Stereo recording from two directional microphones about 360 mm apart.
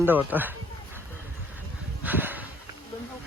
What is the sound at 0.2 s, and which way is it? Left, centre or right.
Speech, centre.